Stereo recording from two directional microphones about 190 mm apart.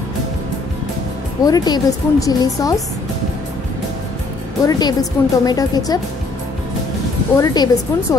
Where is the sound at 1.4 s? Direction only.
20° left (ahead or behind).